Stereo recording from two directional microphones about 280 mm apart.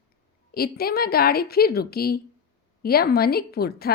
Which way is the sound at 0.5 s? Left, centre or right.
Left.